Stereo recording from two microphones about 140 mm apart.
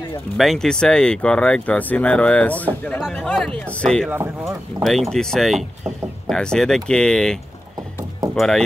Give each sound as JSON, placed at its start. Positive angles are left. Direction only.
{"t": 0.4, "sound": "speech", "side_deg": 5}
{"t": 4.1, "sound": "speech", "side_deg": -20}
{"t": 5.1, "sound": "speech", "side_deg": 5}
{"t": 8.4, "sound": "speech", "side_deg": 5}